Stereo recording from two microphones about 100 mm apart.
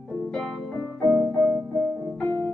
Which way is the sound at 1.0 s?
30° right (ahead or behind).